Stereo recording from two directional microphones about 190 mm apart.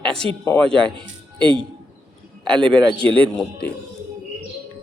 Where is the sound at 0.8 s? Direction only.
25° right (ahead or behind).